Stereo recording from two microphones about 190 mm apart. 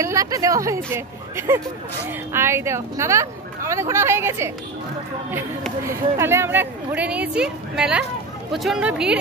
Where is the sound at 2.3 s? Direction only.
15° right (ahead or behind).